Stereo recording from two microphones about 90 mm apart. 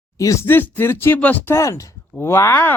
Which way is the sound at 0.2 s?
35° left (ahead or behind).